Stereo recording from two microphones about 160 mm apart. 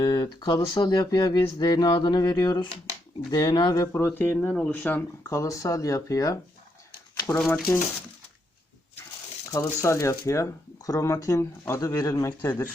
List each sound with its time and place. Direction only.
0.0 s speech: 25° left (ahead or behind)
7.3 s speech: 5° left (ahead or behind)
9.5 s speech: 20° left (ahead or behind)